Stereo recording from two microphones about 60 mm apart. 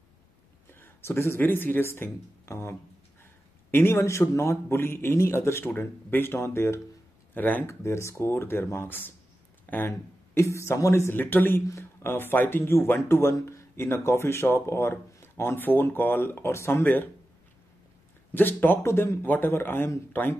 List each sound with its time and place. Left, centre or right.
0.7 s a sound: left
1.4 s speech: left
3.7 s speech: left
7.3 s speech: left
7.6 s speech: left
9.8 s speech: left
11.1 s speech: left
16.8 s speech: left
18.3 s speech: left
18.9 s speech: left
19.2 s speech: left
19.5 s speech: left